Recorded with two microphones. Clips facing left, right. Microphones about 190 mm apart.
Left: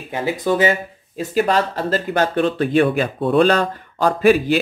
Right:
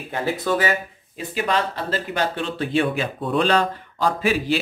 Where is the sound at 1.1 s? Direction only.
40° left (ahead or behind).